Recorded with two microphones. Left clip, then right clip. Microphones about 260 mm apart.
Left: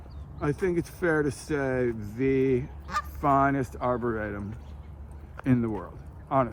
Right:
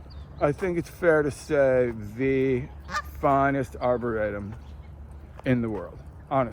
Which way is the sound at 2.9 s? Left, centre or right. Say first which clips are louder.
Even; left.